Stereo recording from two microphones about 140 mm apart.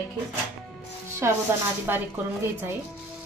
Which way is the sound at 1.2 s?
20° right (ahead or behind).